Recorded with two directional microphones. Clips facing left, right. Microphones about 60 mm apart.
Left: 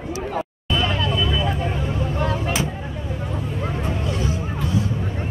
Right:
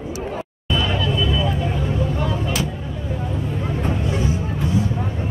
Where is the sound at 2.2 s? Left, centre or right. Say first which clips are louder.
Even; left.